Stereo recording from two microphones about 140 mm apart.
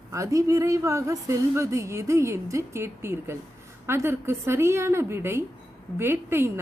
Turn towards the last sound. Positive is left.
turn(degrees=-15)  # may be behind; listen again after turning